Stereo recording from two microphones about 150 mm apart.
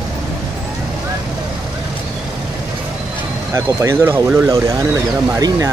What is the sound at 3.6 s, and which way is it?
Speech, 20° right (ahead or behind).